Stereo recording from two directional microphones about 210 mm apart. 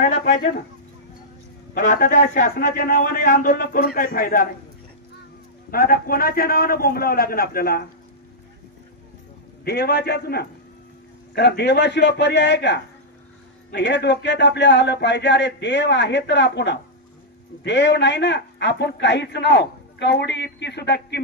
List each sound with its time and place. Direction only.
0.3 s a man's voice: 45° left (ahead or behind)
1.8 s a man's voice: 40° left (ahead or behind)
5.7 s a man's voice: 45° left (ahead or behind)
9.7 s a man's voice: 50° left (ahead or behind)